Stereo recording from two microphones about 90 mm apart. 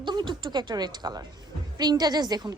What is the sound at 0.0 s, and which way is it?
A woman's voice, 55° right (ahead or behind).